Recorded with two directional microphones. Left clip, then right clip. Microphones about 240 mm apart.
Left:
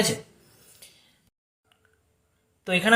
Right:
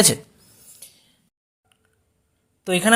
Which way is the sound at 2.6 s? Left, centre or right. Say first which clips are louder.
Right 3 dB; right.